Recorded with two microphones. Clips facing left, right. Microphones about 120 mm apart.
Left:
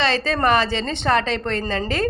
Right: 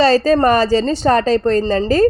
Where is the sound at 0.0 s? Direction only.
40° right (ahead or behind).